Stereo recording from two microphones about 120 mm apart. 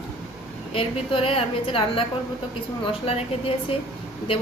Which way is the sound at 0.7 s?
50° left (ahead or behind).